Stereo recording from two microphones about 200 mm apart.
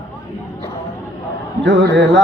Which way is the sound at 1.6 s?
60° right (ahead or behind).